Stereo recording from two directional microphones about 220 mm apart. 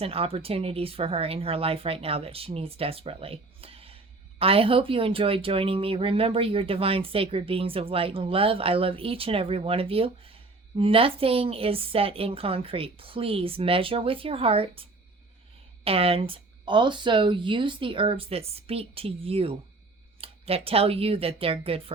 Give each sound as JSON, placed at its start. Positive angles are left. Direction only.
{"t": 0.0, "sound": "speech", "side_deg": -25}